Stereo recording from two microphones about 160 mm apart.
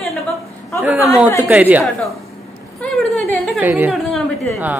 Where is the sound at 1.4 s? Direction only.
10° right (ahead or behind).